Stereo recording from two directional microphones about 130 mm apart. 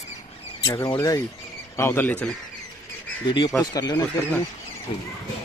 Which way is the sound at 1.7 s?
20° left (ahead or behind).